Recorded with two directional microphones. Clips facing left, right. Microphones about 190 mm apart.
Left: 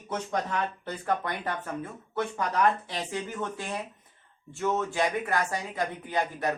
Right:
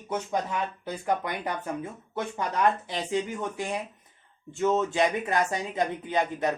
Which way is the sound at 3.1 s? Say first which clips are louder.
Right 6 dB; 15° right (ahead or behind).